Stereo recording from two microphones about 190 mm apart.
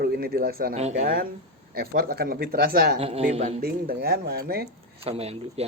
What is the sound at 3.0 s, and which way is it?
Speech, 30° right (ahead or behind).